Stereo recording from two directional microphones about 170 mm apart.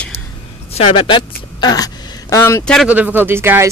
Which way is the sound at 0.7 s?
35° left (ahead or behind).